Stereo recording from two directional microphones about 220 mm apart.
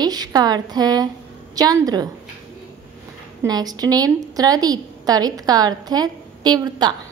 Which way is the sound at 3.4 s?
15° right (ahead or behind).